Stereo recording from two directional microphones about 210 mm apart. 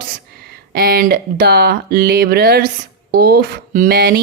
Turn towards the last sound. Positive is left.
turn(degrees=-50)  # may be behind; listen again after turning